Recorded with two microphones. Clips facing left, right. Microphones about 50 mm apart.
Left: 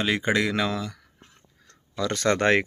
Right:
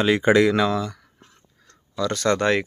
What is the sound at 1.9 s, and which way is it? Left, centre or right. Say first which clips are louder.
Speech: right 2 dB; left.